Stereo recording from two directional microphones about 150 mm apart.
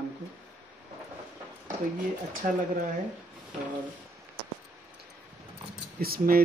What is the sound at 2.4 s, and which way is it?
Speech, 65° right (ahead or behind).